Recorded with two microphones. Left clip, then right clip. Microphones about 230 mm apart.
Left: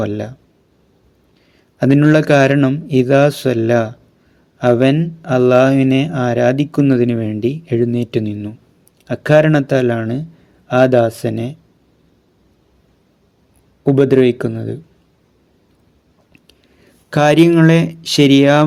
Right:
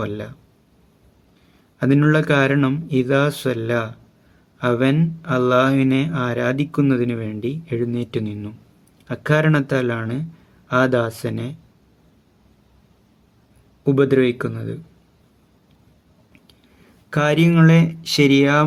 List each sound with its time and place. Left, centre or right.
0.0 s speech: centre
1.8 s speech: centre
13.9 s speech: centre
17.1 s speech: centre